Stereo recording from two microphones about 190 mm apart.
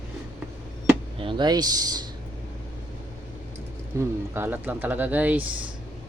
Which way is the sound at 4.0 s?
10° right (ahead or behind).